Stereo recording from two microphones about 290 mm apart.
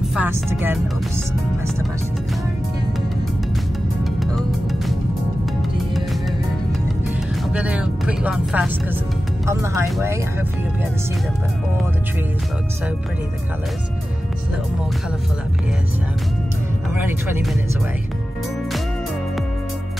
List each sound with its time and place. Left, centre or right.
0.1 s speech: centre
4.2 s music: centre
7.5 s speech: centre